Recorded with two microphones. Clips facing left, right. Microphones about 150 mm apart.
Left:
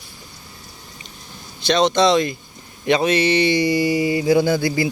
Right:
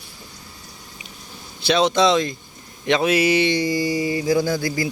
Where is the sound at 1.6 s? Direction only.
5° right (ahead or behind).